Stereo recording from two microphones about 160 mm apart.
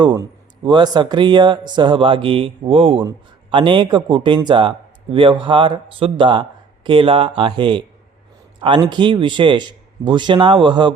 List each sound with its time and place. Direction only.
0.0 s speech: 30° right (ahead or behind)